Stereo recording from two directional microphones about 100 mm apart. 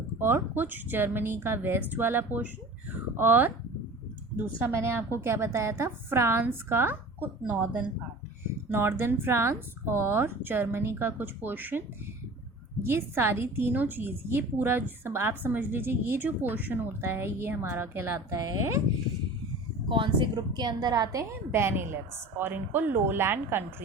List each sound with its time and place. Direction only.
0.2 s a woman's voice: 25° right (ahead or behind)
4.6 s a woman's voice: 25° right (ahead or behind)
12.8 s a woman's voice: 25° right (ahead or behind)
18.3 s a woman's voice: 35° right (ahead or behind)
19.9 s speech: 55° right (ahead or behind)
20.3 s a woman's voice: 45° right (ahead or behind); by 23.6 s 20° right (ahead or behind)